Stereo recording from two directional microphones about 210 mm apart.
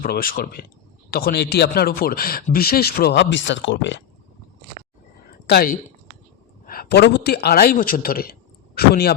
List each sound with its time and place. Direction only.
0.0 s speech: 45° left (ahead or behind); by 4.0 s 60° left (ahead or behind)
5.5 s a man's voice: 45° left (ahead or behind)